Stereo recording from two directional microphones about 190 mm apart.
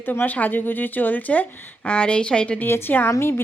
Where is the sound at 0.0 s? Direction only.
10° left (ahead or behind).